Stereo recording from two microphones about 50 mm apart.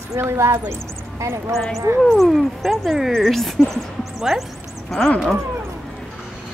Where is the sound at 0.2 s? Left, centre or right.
Right.